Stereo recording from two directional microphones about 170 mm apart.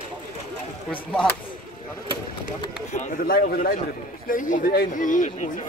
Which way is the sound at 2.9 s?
50° left (ahead or behind).